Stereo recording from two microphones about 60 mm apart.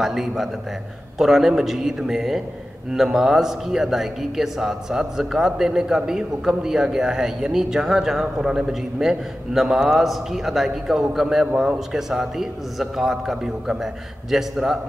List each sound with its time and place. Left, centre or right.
0.0 s a man's voice: centre